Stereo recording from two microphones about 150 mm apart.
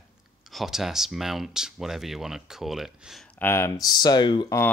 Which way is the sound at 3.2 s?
10° left (ahead or behind).